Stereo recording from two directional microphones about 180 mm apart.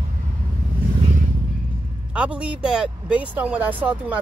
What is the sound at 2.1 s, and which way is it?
Speech, 5° right (ahead or behind).